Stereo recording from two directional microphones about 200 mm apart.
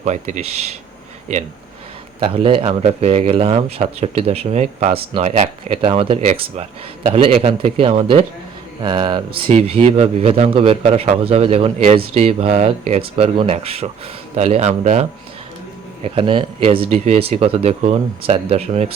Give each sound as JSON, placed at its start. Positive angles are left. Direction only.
{"t": 0.0, "sound": "speech", "side_deg": -35}
{"t": 2.3, "sound": "speech", "side_deg": -25}
{"t": 16.0, "sound": "speech", "side_deg": -25}